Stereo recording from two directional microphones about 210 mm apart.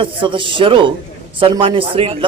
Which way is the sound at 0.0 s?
25° right (ahead or behind).